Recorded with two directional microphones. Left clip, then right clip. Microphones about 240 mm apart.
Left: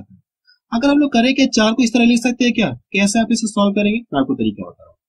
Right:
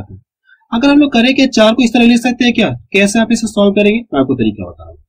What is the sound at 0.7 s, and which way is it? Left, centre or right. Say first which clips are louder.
Speech: right 5 dB; centre.